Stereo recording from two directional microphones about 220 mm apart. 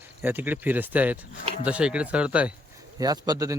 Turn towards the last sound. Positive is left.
turn(degrees=-15)  # may be behind; listen again after turning